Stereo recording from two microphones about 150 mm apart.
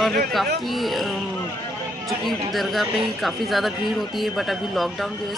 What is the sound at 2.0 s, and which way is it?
Speech, centre (ahead or behind).